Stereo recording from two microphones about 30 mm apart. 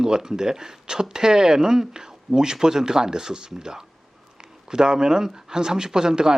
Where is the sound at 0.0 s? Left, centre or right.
Right.